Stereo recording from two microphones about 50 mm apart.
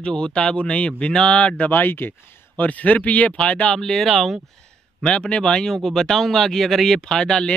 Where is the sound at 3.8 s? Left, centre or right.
Centre.